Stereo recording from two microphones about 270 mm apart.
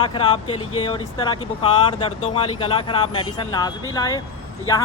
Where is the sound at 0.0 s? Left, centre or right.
Centre.